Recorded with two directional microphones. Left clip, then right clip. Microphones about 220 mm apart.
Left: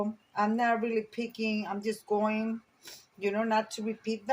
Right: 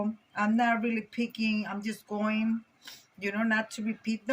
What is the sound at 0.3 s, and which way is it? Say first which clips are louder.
Speech: even; 25° left (ahead or behind).